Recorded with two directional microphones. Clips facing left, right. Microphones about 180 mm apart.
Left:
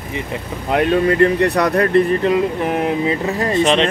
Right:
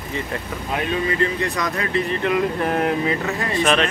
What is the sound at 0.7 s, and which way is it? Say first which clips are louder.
Speech: left 8 dB; 55° left (ahead or behind).